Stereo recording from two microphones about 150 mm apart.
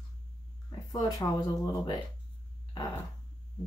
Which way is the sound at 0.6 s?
25° left (ahead or behind).